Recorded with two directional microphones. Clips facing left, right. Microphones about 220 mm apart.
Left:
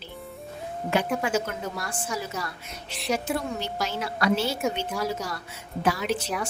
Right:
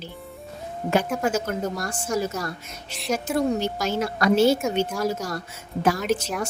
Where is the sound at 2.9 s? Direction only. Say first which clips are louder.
Right 1 dB; centre (ahead or behind).